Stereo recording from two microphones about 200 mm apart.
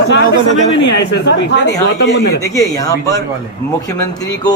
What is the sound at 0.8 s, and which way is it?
Speech, 65° left (ahead or behind).